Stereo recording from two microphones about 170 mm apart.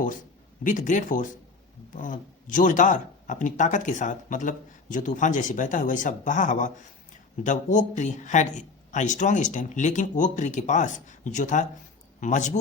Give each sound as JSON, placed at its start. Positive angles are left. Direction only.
{"t": 0.6, "sound": "speech", "side_deg": 50}